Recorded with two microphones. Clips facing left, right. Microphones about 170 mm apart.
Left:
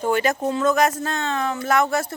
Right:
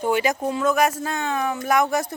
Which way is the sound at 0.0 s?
15° right (ahead or behind).